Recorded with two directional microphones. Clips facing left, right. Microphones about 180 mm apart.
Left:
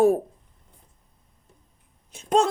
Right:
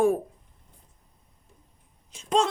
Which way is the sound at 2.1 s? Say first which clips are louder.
Left 3 dB; 55° left (ahead or behind).